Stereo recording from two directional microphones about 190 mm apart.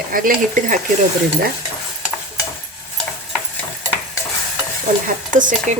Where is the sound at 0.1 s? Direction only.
50° right (ahead or behind).